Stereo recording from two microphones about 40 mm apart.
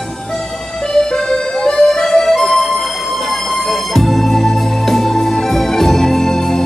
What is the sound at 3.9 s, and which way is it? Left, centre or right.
Organ, centre.